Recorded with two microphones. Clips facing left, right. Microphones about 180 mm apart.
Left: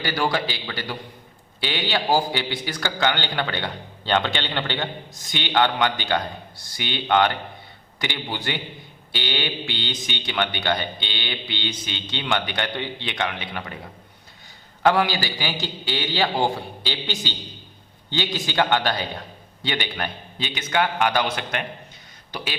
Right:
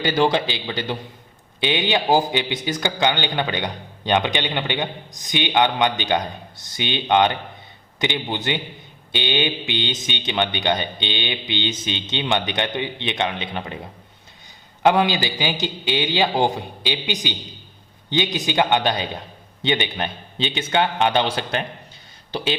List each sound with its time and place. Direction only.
0.0 s a man's voice: 20° right (ahead or behind)
14.8 s a man's voice: 20° right (ahead or behind)